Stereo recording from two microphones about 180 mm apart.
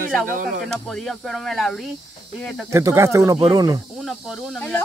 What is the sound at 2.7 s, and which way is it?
Speech, 15° right (ahead or behind).